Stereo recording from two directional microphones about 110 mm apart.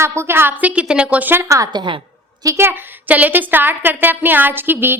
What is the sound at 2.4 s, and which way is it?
Speech, 30° right (ahead or behind).